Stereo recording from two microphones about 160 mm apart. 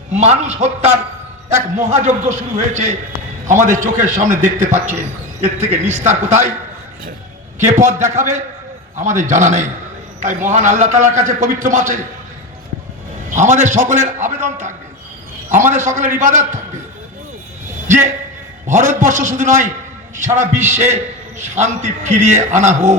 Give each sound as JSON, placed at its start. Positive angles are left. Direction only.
{"t": 0.1, "sound": "a man's voice", "side_deg": -45}
{"t": 6.1, "sound": "a man's voice", "side_deg": -50}
{"t": 7.7, "sound": "a man's voice", "side_deg": -50}
{"t": 13.3, "sound": "a man's voice", "side_deg": -50}
{"t": 17.8, "sound": "a man's voice", "side_deg": -50}